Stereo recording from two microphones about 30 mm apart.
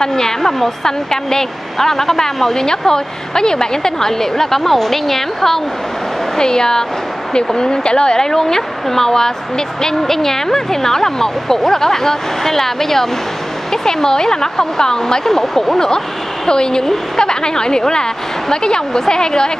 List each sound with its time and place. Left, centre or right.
0.0 s a woman's voice: centre
6.3 s speech: left
8.2 s a woman's voice: centre
16.4 s speech: left